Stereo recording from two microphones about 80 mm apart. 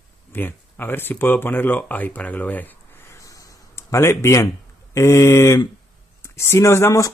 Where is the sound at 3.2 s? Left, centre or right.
Left.